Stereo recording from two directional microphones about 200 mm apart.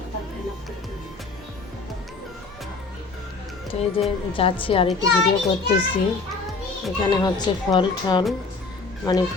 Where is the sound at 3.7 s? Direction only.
30° left (ahead or behind).